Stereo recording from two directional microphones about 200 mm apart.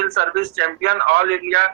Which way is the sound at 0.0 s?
50° right (ahead or behind).